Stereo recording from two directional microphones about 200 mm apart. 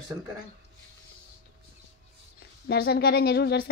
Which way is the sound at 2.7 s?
50° left (ahead or behind).